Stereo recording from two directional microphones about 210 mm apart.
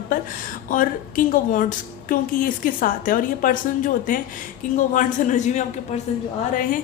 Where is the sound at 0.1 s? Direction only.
40° left (ahead or behind).